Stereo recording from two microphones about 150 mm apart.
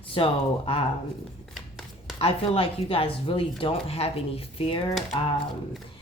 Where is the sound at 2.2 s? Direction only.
40° left (ahead or behind).